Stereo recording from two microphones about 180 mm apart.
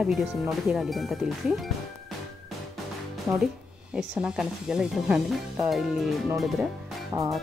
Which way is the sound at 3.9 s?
5° right (ahead or behind).